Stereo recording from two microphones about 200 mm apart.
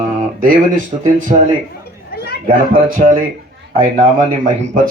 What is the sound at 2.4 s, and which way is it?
Speech, 45° right (ahead or behind).